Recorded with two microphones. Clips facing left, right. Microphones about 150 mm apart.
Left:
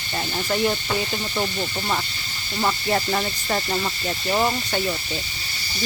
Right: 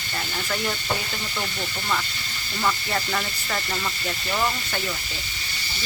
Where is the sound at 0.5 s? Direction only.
25° left (ahead or behind).